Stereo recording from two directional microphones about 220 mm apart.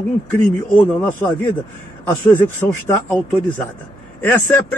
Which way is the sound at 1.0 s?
10° left (ahead or behind).